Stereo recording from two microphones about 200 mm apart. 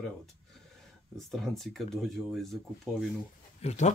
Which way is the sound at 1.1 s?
Centre (ahead or behind).